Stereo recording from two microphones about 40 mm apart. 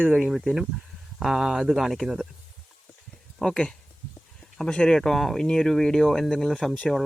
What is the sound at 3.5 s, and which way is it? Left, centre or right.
Speech, centre.